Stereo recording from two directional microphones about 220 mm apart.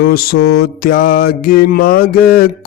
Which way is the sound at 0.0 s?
45° left (ahead or behind).